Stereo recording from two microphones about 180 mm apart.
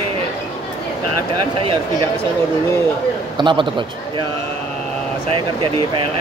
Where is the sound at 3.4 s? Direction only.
25° right (ahead or behind).